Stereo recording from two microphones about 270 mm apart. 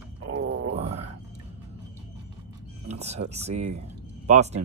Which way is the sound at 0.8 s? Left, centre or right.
Right.